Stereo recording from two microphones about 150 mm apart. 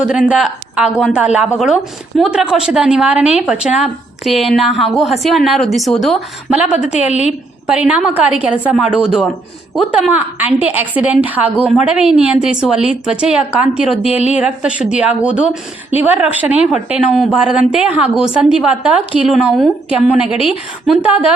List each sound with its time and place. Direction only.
0.0 s a woman's voice: 5° right (ahead or behind)
7.7 s a woman's voice: 5° right (ahead or behind)
13.8 s a woman's voice: 45° left (ahead or behind)
14.3 s a woman's voice: 5° right (ahead or behind)